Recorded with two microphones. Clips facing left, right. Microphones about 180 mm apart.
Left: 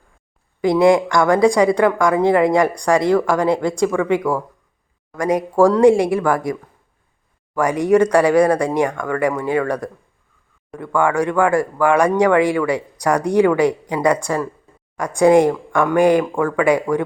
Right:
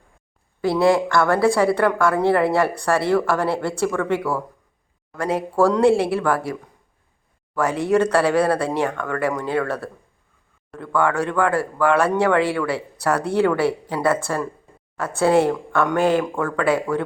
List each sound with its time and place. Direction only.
0.6 s speech: 15° left (ahead or behind)